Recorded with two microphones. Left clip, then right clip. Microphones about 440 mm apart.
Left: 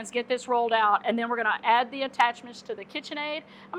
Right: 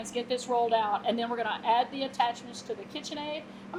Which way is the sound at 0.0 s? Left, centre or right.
Left.